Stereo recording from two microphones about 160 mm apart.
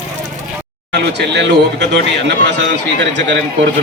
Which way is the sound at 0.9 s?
90° right.